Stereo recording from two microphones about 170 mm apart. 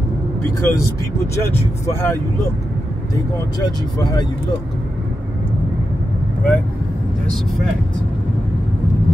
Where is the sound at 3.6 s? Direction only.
25° left (ahead or behind).